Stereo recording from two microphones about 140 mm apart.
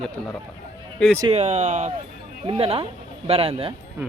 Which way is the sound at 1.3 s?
50° right (ahead or behind).